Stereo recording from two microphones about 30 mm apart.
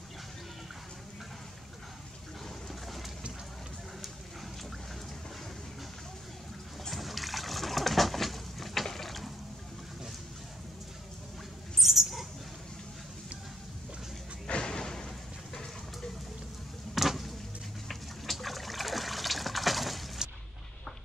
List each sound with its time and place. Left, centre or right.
6.9 s liquid: centre
8.8 s ratchet: centre
11.8 s dog: centre
14.6 s slam: left
16.9 s a sound: centre
17.8 s water: centre
20.2 s dog: right